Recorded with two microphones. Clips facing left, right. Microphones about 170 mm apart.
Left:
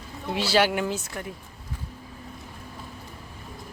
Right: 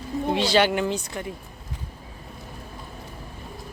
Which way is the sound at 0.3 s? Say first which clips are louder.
Right 1 dB; 5° left (ahead or behind).